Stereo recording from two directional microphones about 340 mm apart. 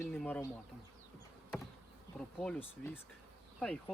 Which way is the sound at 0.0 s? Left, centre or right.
Centre.